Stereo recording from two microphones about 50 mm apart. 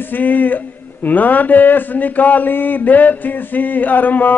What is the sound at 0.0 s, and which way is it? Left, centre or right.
Speech, left.